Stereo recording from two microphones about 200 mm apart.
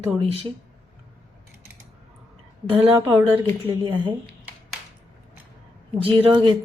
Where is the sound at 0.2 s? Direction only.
30° right (ahead or behind).